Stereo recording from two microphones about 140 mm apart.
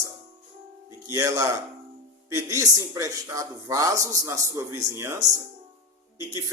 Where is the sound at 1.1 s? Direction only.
20° right (ahead or behind).